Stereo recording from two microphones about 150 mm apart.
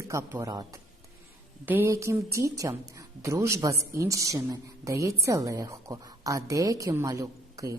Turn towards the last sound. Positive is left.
turn(degrees=-20)  # may be behind; listen again after turning